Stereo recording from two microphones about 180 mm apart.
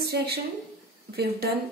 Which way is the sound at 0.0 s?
65° right (ahead or behind).